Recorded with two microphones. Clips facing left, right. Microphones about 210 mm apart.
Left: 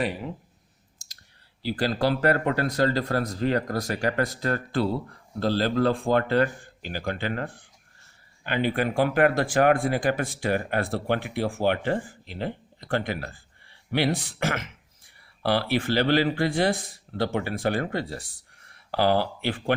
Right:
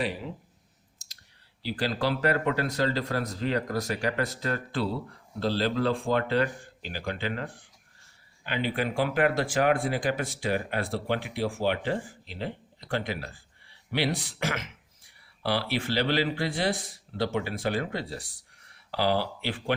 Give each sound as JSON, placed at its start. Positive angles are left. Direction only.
{"t": 1.6, "sound": "speech", "side_deg": 45}